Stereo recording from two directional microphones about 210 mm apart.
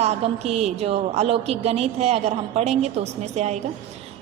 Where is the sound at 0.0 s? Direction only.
30° right (ahead or behind).